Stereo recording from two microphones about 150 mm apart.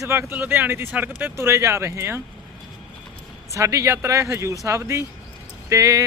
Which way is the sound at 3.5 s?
20° right (ahead or behind).